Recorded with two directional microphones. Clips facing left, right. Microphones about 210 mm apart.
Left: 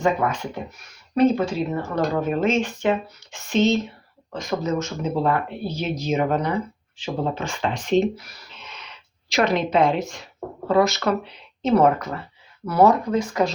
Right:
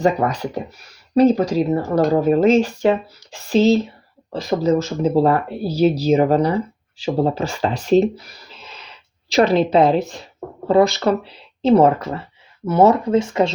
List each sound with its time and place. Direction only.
0.0 s speech: 35° right (ahead or behind)
8.6 s a sound: 35° right (ahead or behind)
9.3 s speech: 35° right (ahead or behind)